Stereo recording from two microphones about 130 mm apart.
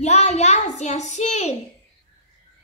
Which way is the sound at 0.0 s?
60° left (ahead or behind).